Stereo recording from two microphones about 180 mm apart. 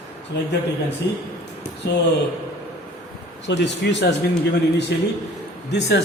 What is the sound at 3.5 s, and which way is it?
Speech, 75° left (ahead or behind).